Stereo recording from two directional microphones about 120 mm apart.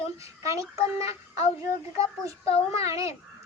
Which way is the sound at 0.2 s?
25° right (ahead or behind).